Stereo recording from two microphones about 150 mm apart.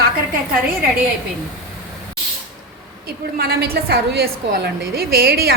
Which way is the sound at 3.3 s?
90° right.